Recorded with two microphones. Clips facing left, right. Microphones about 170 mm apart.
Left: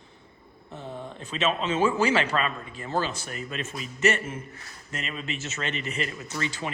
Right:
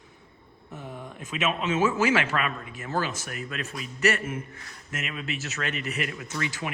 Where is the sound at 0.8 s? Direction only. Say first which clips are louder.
Left 3 dB; 25° left (ahead or behind).